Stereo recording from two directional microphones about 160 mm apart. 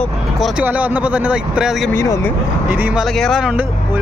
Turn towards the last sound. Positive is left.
turn(degrees=0)  # may be behind; listen again after turning